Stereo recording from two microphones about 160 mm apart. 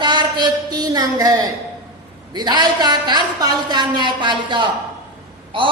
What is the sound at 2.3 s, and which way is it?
A man's voice, 25° right (ahead or behind).